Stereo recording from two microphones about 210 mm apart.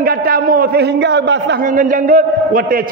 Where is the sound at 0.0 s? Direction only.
45° right (ahead or behind).